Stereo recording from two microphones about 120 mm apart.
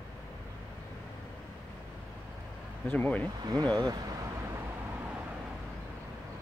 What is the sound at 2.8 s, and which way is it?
Speech, 15° left (ahead or behind).